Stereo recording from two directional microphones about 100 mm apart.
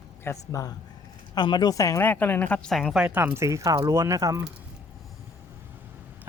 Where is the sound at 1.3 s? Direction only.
50° left (ahead or behind).